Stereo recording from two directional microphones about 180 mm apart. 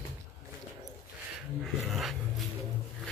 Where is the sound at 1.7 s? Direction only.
Centre (ahead or behind).